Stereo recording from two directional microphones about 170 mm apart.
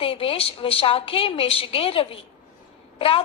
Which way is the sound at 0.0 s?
35° left (ahead or behind).